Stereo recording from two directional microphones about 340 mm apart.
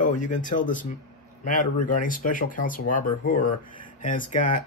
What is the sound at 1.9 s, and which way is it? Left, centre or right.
Speech, left.